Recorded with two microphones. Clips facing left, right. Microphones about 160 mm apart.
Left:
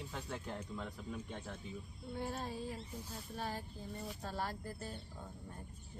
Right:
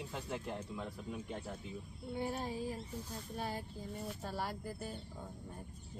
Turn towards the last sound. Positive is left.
turn(degrees=-10)  # may be behind; listen again after turning